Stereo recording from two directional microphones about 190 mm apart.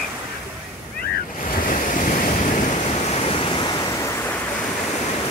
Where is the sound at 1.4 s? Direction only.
45° left (ahead or behind); by 4.4 s 15° left (ahead or behind).